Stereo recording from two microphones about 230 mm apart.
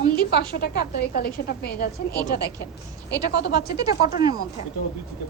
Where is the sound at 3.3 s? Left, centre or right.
Left.